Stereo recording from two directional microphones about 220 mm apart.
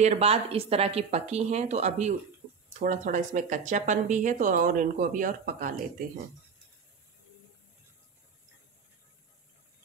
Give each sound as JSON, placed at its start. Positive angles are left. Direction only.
{"t": 0.0, "sound": "speech", "side_deg": -30}